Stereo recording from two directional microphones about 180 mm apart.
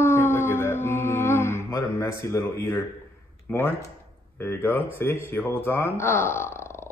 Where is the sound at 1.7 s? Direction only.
15° left (ahead or behind).